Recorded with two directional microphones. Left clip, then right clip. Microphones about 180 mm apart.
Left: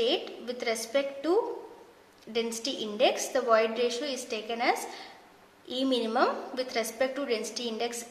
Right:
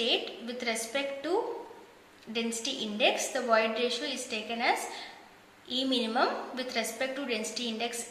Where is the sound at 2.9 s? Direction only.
50° left (ahead or behind).